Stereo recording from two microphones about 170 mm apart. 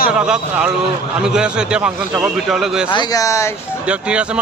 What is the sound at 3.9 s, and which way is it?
Speech, 5° right (ahead or behind).